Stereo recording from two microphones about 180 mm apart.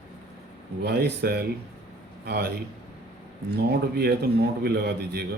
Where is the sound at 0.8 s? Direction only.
65° right (ahead or behind).